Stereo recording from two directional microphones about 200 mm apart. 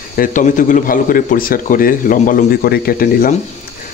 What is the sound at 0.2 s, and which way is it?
Speech, 40° left (ahead or behind).